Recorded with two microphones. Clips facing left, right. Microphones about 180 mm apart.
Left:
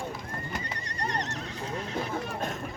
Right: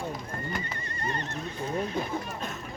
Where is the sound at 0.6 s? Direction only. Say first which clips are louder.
Even; 85° left.